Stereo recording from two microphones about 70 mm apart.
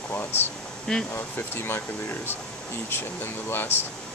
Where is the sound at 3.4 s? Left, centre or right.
Left.